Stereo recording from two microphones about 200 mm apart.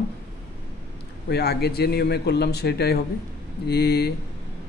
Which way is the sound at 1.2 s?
55° left (ahead or behind).